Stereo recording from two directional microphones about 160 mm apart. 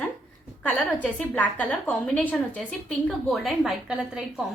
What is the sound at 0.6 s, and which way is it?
A woman's voice, 10° left (ahead or behind).